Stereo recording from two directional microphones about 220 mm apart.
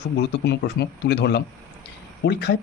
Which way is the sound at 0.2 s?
50° left (ahead or behind).